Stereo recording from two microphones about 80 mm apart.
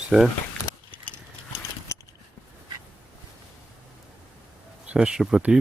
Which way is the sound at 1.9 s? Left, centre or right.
Left.